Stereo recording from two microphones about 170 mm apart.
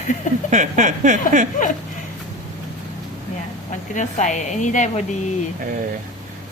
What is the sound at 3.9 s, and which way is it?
A woman's voice, 45° left (ahead or behind).